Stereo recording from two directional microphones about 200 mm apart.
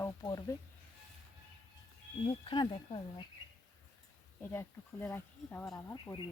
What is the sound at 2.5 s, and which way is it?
Speech, 25° left (ahead or behind).